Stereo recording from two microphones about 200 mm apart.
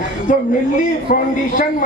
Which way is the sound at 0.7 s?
40° left (ahead or behind).